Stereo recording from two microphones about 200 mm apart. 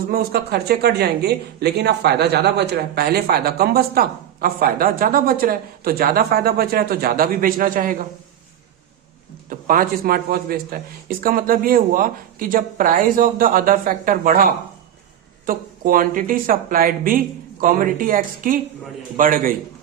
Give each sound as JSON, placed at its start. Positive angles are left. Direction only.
{"t": 0.1, "sound": "speech", "side_deg": -50}
{"t": 9.5, "sound": "speech", "side_deg": -45}